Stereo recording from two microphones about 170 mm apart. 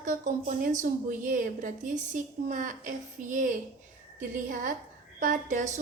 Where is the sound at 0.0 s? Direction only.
50° right (ahead or behind).